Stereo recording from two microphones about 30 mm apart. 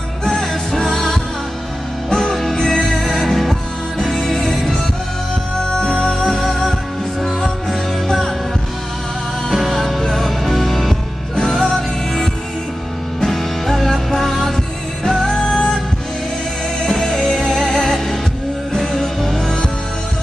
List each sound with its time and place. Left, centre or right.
0.3 s music: centre
2.5 s music: centre
2.9 s music: centre
5.6 s music: left
6.4 s music: centre
9.5 s music: centre
16.8 s music: centre